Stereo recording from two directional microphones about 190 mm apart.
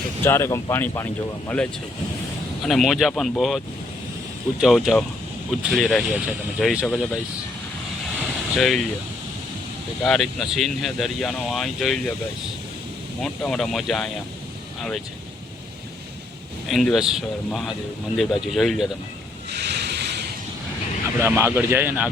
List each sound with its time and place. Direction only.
0.2 s speech: 10° left (ahead or behind)
2.6 s speech: centre (ahead or behind)
4.6 s speech: centre (ahead or behind)
8.5 s speech: centre (ahead or behind)
10.0 s speech: centre (ahead or behind)
13.2 s speech: centre (ahead or behind)
16.6 s speech: centre (ahead or behind)
19.5 s a sound: 65° right (ahead or behind)
21.2 s a man's voice: 10° right (ahead or behind)